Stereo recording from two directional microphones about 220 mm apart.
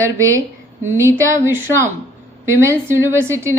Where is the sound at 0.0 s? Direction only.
15° right (ahead or behind).